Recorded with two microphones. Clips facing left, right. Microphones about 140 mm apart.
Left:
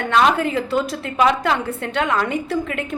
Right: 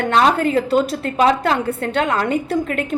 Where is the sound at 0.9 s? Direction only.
35° right (ahead or behind).